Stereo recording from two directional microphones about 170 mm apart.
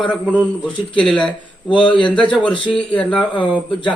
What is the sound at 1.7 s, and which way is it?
Speech, 30° left (ahead or behind).